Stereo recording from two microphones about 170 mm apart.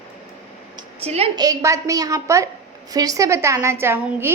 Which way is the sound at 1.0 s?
35° right (ahead or behind).